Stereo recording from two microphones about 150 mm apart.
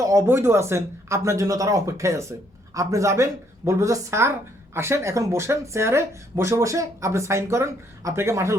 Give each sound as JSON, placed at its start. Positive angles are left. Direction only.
{"t": 0.0, "sound": "speech", "side_deg": -20}